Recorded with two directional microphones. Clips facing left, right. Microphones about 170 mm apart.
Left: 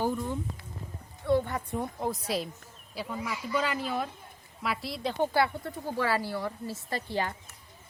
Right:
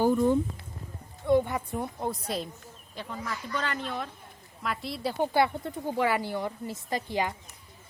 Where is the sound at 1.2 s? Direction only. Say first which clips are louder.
Right 3 dB; 15° right (ahead or behind); by 5.1 s centre (ahead or behind).